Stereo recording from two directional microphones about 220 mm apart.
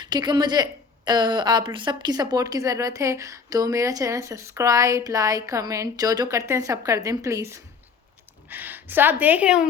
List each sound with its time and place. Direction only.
0.0 s a woman's voice: 20° right (ahead or behind)